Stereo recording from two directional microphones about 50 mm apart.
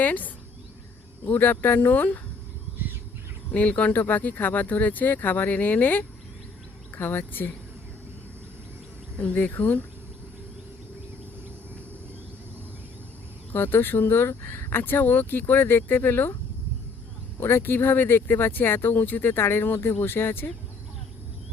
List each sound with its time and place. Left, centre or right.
0.0 s speech: left
3.5 s speech: left
3.9 s speech: left
9.1 s speech: left
9.4 s speech: left
13.5 s speech: left
14.3 s speech: left
17.4 s speech: left